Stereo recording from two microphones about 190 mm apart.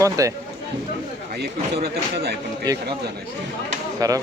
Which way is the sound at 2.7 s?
20° right (ahead or behind).